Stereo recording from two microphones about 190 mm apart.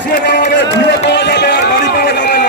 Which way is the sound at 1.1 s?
60° left (ahead or behind).